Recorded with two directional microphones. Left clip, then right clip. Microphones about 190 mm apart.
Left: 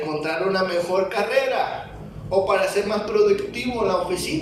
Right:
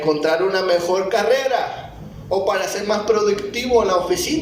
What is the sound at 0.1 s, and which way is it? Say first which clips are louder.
A man's voice: right 7 dB; 35° right (ahead or behind).